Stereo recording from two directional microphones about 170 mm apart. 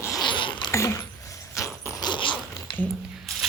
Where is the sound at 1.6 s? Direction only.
20° left (ahead or behind).